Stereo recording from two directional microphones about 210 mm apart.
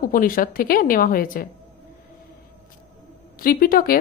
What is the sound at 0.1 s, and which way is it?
Speech, 40° left (ahead or behind).